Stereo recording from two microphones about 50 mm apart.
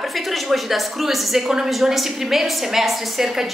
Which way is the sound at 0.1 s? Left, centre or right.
Centre.